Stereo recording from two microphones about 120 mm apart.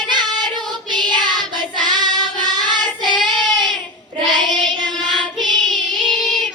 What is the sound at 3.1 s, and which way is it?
Child singing, centre (ahead or behind).